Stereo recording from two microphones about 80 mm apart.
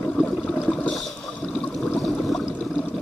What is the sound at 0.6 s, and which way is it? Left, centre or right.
Toilet flush, centre.